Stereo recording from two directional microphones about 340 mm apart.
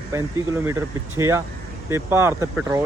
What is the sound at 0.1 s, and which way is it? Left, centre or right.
Speech, centre.